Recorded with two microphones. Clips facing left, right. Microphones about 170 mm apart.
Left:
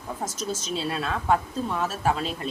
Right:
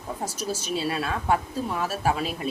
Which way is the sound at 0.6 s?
5° right (ahead or behind).